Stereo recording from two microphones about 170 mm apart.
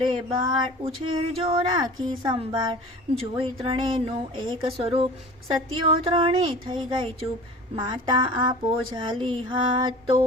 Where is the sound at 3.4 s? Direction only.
30° right (ahead or behind).